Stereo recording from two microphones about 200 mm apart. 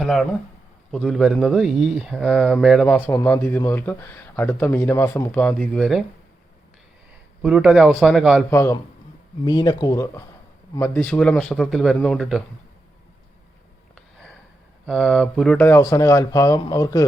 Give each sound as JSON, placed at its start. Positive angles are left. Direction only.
{"t": 0.0, "sound": "speech", "side_deg": 0}
{"t": 7.4, "sound": "speech", "side_deg": -5}
{"t": 8.4, "sound": "speech", "side_deg": 15}
{"t": 14.8, "sound": "speech", "side_deg": 0}